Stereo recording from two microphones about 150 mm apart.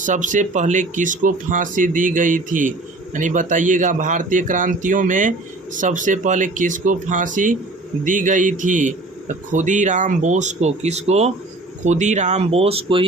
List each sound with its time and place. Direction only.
0.0 s speech: 55° right (ahead or behind); by 13.1 s 40° right (ahead or behind)